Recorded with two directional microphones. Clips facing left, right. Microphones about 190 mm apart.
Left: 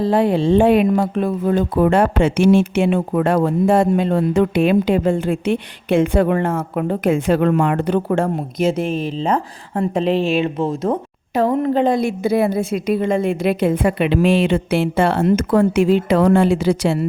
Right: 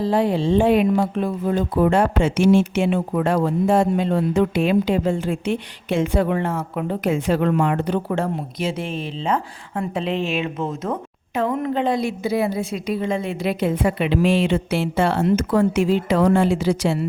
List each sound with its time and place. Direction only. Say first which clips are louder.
0.0 s speech: left 3 dB; 60° left (ahead or behind)